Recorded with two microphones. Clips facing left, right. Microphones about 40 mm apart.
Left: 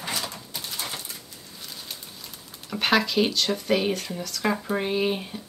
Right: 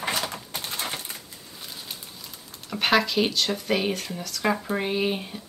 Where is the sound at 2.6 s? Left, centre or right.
Centre.